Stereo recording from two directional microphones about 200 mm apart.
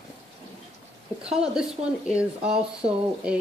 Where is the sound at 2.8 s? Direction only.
30° right (ahead or behind).